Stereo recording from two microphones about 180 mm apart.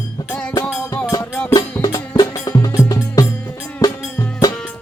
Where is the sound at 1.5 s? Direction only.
20° left (ahead or behind).